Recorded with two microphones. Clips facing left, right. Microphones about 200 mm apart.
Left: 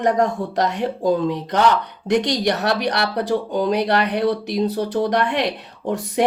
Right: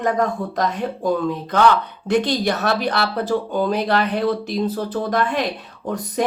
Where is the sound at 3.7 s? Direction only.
65° left (ahead or behind).